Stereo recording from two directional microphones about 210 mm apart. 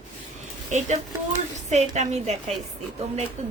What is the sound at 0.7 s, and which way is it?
A woman's voice, 35° right (ahead or behind).